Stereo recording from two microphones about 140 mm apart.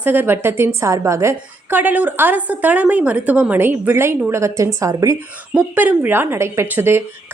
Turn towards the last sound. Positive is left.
turn(degrees=-15)  # may be behind; listen again after turning